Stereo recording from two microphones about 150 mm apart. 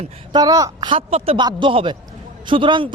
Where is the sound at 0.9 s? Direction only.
40° right (ahead or behind).